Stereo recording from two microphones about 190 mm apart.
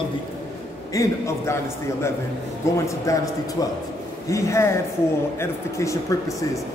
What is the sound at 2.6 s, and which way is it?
Speech, 15° left (ahead or behind).